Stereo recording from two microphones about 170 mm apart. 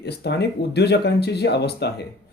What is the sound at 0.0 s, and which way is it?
Speech, 75° left (ahead or behind).